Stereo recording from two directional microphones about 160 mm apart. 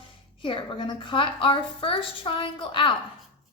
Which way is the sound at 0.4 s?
30° left (ahead or behind).